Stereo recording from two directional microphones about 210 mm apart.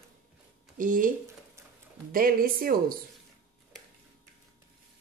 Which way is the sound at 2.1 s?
45° right (ahead or behind).